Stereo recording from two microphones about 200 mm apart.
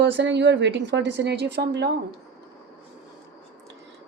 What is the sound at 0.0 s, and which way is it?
Speech, 60° right (ahead or behind).